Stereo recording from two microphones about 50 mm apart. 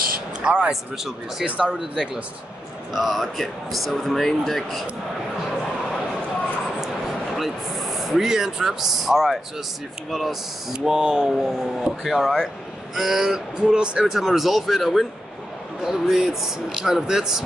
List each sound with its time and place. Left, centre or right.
0.4 s a man's voice: centre
0.7 s speech: centre
1.4 s speech: right
2.9 s speech: centre
7.3 s speech: centre
13.6 s speech: centre